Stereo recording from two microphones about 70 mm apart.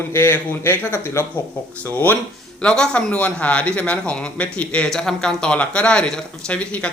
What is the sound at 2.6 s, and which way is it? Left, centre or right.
Speech, centre.